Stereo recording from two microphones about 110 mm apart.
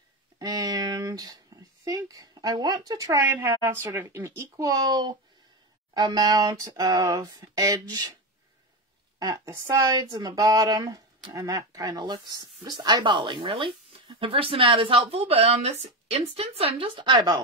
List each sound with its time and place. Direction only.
0.4 s speech: 35° right (ahead or behind)
9.2 s speech: 30° right (ahead or behind)